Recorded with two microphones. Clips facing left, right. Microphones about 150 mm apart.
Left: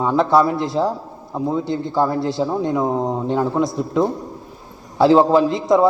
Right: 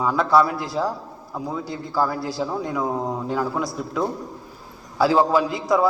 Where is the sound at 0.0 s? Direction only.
25° left (ahead or behind).